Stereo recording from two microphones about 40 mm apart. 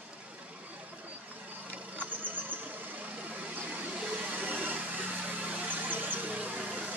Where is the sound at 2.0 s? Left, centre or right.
Right.